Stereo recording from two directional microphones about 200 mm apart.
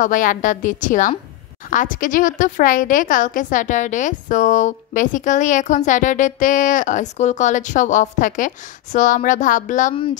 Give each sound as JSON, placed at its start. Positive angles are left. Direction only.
{"t": 0.0, "sound": "a woman's voice", "side_deg": 40}